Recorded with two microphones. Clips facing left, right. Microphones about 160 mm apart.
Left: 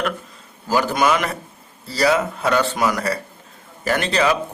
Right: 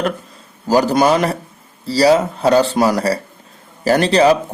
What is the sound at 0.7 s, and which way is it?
A man's voice, 35° right (ahead or behind).